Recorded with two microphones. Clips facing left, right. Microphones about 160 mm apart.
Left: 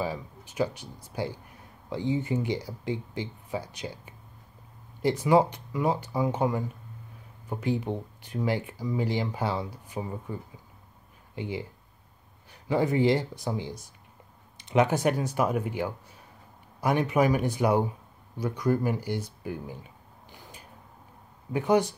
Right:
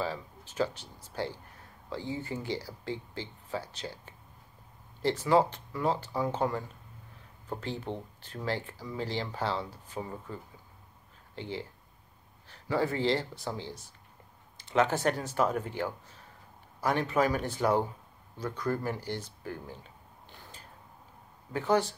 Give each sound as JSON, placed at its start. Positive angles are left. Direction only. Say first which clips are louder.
{"t": 0.0, "sound": "speech", "louder": "left 3 dB", "side_deg": 15}